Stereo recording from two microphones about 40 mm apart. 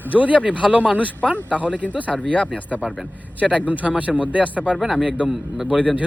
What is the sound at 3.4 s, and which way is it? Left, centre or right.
Speech, left.